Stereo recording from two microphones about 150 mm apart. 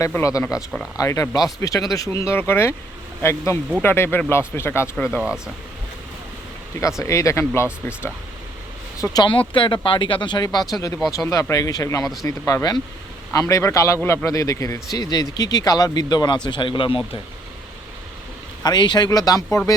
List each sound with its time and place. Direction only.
0.1 s a man's voice: 20° left (ahead or behind)
7.0 s a man's voice: 20° left (ahead or behind)
9.0 s a man's voice: 30° left (ahead or behind)
18.6 s a man's voice: 30° left (ahead or behind)